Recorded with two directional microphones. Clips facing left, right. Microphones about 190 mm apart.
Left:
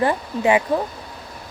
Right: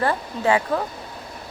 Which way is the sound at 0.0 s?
15° left (ahead or behind).